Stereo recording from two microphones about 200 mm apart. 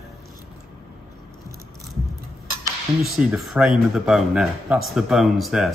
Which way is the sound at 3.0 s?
Centre (ahead or behind).